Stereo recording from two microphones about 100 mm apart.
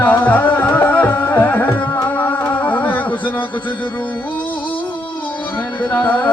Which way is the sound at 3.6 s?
55° left (ahead or behind).